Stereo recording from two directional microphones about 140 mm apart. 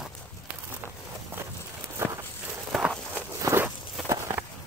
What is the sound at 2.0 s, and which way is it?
Walk, 20° right (ahead or behind).